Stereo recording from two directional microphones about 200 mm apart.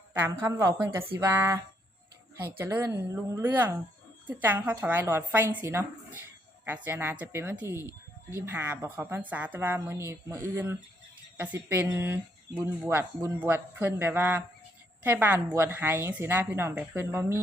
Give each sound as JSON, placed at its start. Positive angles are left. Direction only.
{"t": 0.1, "sound": "speech", "side_deg": -10}